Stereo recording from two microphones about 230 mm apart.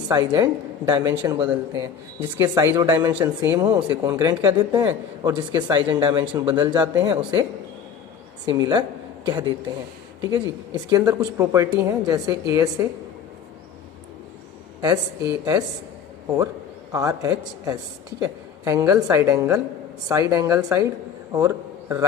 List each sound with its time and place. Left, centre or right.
0.1 s speech: centre
8.4 s speech: centre
10.8 s speech: centre
14.8 s speech: centre
16.9 s a man's voice: centre